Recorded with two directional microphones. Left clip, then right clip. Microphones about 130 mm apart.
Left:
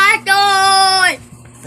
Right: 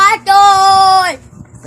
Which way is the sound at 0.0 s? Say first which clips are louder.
Right 4 dB; 25° right (ahead or behind).